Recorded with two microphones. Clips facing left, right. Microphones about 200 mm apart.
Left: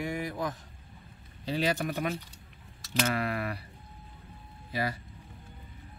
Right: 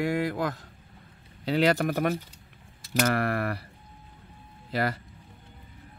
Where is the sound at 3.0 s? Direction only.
65° right (ahead or behind).